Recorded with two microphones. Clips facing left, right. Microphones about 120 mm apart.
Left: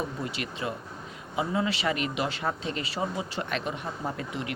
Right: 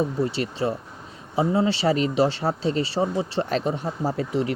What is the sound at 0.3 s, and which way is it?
Speech, 30° right (ahead or behind).